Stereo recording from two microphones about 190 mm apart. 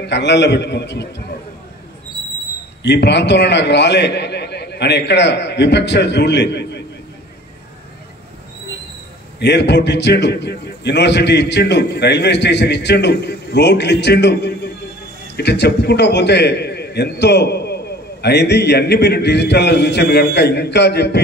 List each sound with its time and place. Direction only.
0.0 s a man's voice: 65° left (ahead or behind)
2.8 s a man's voice: 65° left (ahead or behind)
9.4 s a man's voice: 65° left (ahead or behind)